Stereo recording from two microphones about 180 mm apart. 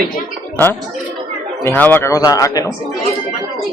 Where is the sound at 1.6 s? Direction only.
10° left (ahead or behind).